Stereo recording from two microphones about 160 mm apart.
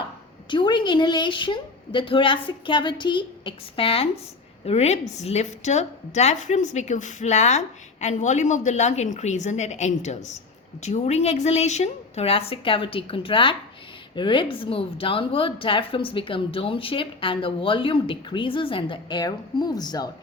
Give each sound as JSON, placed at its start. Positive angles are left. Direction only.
{"t": 0.5, "sound": "a woman's voice", "side_deg": 30}